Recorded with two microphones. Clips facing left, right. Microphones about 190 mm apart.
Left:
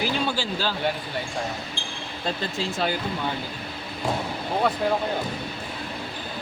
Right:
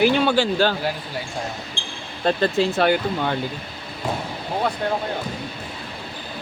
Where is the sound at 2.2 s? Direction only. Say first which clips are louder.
Right 9 dB; 65° right (ahead or behind).